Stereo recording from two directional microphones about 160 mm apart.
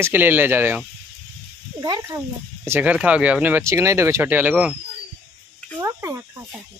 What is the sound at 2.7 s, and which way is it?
Speech, 10° right (ahead or behind).